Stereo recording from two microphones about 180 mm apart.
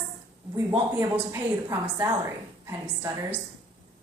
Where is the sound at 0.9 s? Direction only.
15° right (ahead or behind).